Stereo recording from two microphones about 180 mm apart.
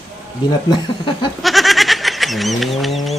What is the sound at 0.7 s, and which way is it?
Speech, 25° left (ahead or behind).